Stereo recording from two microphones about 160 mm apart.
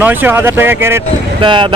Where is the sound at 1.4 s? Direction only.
30° right (ahead or behind).